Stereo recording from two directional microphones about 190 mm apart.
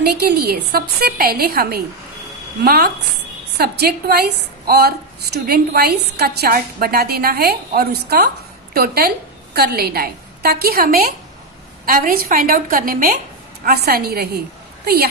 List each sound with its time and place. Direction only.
0.0 s a woman's voice: 55° right (ahead or behind)